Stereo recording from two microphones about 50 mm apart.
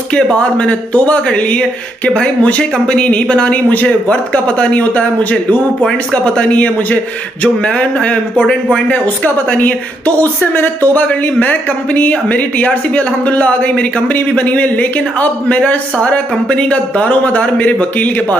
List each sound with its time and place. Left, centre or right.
0.1 s a woman's voice: left
11.0 s speech: left